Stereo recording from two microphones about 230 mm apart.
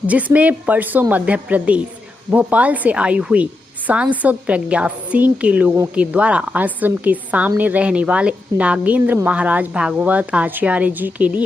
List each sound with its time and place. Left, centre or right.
0.1 s a woman's voice: centre